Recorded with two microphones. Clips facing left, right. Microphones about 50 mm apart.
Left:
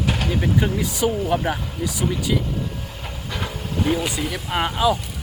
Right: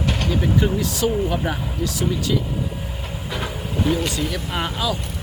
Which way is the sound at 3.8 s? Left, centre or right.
Centre.